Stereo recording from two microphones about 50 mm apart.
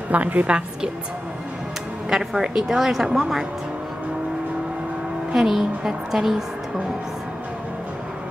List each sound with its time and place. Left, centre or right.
0.1 s a woman's voice: right
2.0 s a woman's voice: centre
5.3 s a woman's voice: centre